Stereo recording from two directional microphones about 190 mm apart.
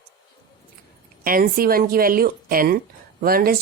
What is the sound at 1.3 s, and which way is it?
Speech, 50° right (ahead or behind).